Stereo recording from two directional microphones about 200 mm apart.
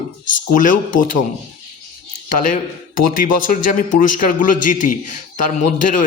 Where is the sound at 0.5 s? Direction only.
40° left (ahead or behind).